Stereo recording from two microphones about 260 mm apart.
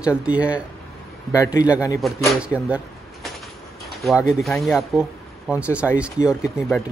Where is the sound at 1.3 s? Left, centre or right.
Centre.